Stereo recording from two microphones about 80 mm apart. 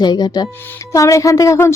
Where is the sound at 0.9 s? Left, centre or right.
Left.